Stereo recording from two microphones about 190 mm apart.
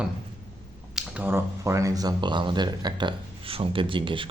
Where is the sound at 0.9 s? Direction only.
10° right (ahead or behind); by 4.3 s 25° right (ahead or behind).